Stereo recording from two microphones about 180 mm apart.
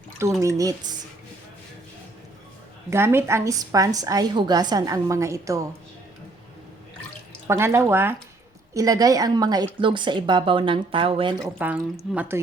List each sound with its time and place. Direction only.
0.2 s speech: 15° right (ahead or behind)
2.9 s a woman's voice: 15° right (ahead or behind)
7.4 s a woman's voice: 15° right (ahead or behind)
11.6 s a woman's voice: 10° right (ahead or behind)